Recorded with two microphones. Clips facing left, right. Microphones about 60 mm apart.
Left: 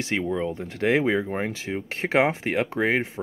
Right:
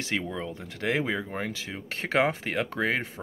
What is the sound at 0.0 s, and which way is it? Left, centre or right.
Speech, left.